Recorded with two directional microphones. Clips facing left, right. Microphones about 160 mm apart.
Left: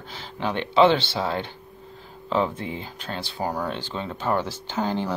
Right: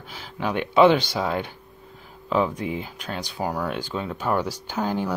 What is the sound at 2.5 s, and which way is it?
Speech, 15° right (ahead or behind).